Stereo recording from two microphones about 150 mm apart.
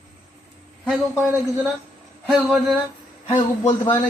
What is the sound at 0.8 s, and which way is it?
Speech, 10° right (ahead or behind).